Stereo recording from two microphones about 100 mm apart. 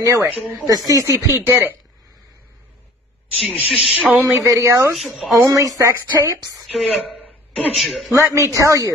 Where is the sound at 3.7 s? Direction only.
5° right (ahead or behind).